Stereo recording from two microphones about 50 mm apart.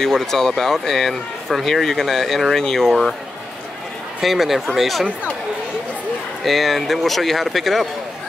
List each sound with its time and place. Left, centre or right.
0.0 s speech: centre
4.2 s speech: centre
6.4 s speech: centre